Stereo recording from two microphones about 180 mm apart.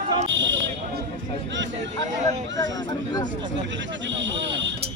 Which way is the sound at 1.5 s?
90° right.